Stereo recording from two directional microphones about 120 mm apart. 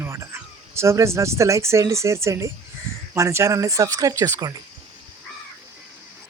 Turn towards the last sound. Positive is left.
turn(degrees=-30)  # may be behind; listen again after turning